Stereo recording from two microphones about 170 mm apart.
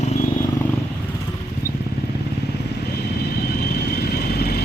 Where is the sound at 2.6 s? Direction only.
75° left (ahead or behind).